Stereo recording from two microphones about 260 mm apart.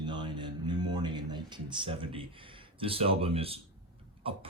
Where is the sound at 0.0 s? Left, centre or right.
Centre.